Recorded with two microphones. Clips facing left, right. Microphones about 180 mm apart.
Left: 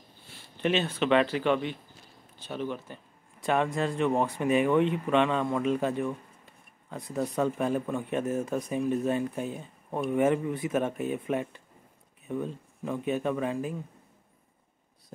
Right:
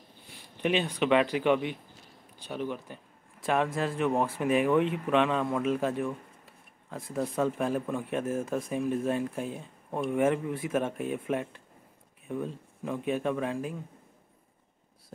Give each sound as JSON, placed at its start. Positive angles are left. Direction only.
{"t": 0.3, "sound": "speech", "side_deg": -15}